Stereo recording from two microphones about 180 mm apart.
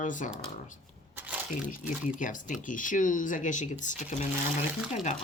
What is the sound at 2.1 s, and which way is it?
Speech, 45° left (ahead or behind).